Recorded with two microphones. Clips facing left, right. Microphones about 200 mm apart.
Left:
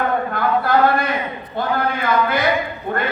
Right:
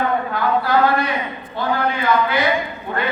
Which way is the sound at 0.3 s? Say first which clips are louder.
Left 1 dB; 50° left (ahead or behind).